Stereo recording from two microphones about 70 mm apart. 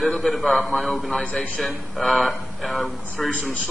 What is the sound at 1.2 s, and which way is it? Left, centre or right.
Speech, centre.